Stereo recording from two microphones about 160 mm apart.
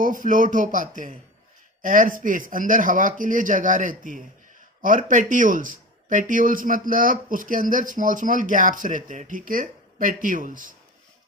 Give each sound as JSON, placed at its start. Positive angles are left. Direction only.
{"t": 0.0, "sound": "speech", "side_deg": -55}